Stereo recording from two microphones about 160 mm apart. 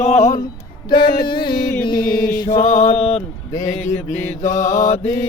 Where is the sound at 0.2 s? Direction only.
20° left (ahead or behind).